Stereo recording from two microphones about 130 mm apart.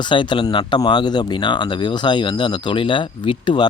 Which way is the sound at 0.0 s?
35° left (ahead or behind).